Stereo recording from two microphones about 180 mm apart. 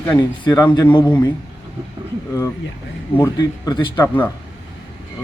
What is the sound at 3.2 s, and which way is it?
Speech, 20° left (ahead or behind).